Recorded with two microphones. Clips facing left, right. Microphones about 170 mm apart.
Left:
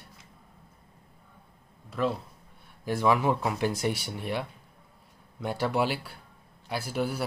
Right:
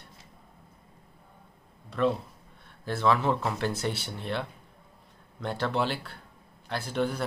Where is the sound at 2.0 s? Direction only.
Centre (ahead or behind).